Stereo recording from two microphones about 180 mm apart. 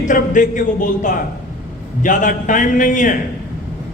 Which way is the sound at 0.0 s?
45° left (ahead or behind).